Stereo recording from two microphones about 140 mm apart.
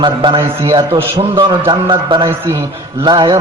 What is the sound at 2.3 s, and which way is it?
A man's voice, 20° right (ahead or behind).